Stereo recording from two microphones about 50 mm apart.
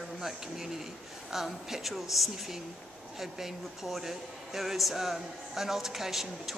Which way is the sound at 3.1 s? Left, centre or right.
Centre.